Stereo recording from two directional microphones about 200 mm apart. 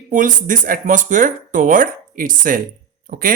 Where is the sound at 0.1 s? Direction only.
40° right (ahead or behind).